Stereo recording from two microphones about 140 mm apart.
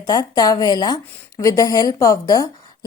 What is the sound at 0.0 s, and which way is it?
A woman's voice, 25° left (ahead or behind).